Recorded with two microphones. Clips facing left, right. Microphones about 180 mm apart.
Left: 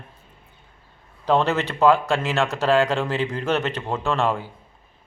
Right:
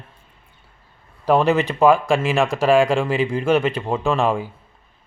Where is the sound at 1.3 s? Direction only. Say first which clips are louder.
Right 4 dB; 10° right (ahead or behind).